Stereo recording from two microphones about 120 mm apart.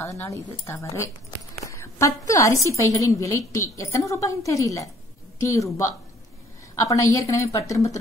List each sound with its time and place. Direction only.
0.0 s a woman's voice: 25° left (ahead or behind)